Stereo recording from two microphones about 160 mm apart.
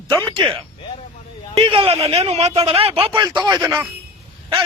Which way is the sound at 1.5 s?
35° right (ahead or behind).